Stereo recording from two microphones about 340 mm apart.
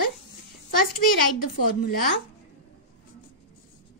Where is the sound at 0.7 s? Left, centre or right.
Left.